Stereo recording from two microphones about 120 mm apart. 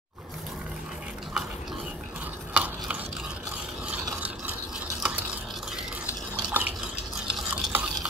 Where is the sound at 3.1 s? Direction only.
5° right (ahead or behind).